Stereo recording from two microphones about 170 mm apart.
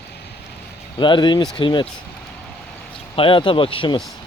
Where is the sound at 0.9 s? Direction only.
25° left (ahead or behind).